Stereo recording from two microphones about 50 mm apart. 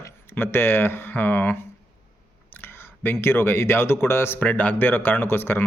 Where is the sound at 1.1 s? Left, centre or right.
Left.